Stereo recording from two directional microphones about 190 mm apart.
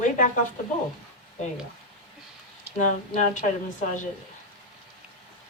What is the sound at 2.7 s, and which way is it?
Speech, 40° left (ahead or behind).